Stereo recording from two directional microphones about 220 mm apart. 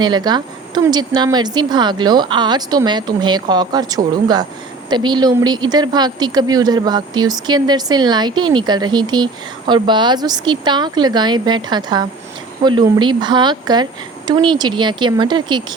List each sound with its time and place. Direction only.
0.0 s a woman's voice: 20° right (ahead or behind)